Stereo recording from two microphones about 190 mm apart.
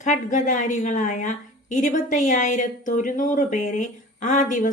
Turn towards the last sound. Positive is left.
turn(degrees=45)  # may be behind; listen again after turning